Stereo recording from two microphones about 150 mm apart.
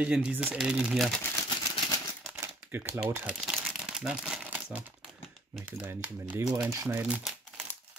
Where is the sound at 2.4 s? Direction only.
15° right (ahead or behind).